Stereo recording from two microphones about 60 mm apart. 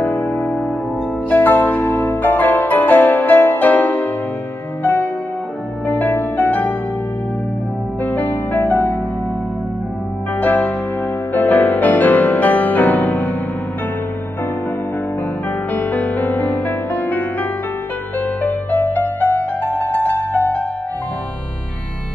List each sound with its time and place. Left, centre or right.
1.3 s music: left
5.9 s music: left
8.0 s music: left
10.4 s music: left
15.7 s music: left
18.9 s music: left